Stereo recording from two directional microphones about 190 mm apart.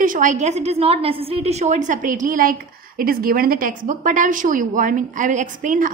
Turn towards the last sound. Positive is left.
turn(degrees=-45)  # may be behind; listen again after turning